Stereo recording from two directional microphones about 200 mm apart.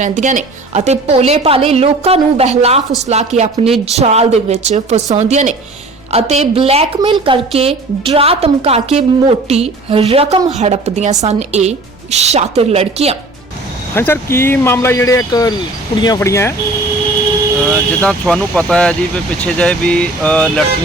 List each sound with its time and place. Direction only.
0.0 s a woman's voice: 40° right (ahead or behind)
13.9 s speech: 10° left (ahead or behind)
17.6 s speech: 5° left (ahead or behind)